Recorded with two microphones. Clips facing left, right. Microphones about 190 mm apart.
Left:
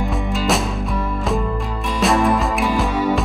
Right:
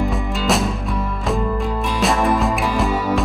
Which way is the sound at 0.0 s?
Centre (ahead or behind).